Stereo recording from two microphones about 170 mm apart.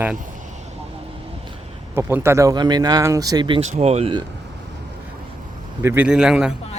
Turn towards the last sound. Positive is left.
turn(degrees=-5)  # may be behind; listen again after turning